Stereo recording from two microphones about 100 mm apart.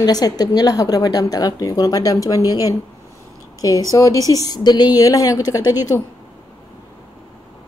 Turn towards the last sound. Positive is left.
turn(degrees=40)  # may be behind; listen again after turning